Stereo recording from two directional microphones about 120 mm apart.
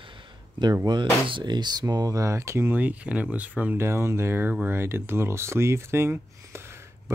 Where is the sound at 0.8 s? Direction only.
40° right (ahead or behind).